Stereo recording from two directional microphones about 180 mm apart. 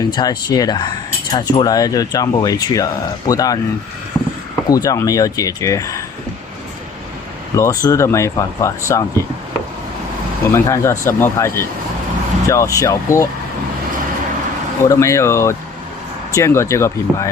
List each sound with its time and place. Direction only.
0.0 s speech: 20° left (ahead or behind)
4.1 s vehicle: 10° left (ahead or behind)
4.7 s speech: 20° left (ahead or behind)
7.5 s speech: 15° left (ahead or behind)
10.5 s speech: 15° left (ahead or behind)
14.8 s speech: 15° left (ahead or behind)